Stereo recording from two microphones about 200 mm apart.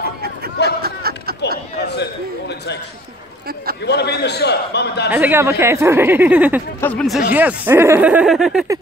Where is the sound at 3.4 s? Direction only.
50° right (ahead or behind).